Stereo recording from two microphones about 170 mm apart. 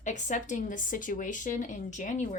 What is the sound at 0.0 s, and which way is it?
Speech, 45° left (ahead or behind).